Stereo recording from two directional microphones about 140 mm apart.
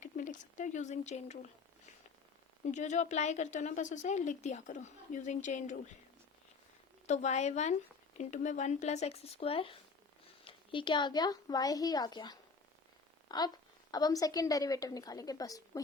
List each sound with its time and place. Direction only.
0.0 s a sound: 65° left (ahead or behind)
2.6 s a woman's voice: 60° left (ahead or behind)
7.1 s a woman's voice: 55° left (ahead or behind); by 15.8 s 25° left (ahead or behind)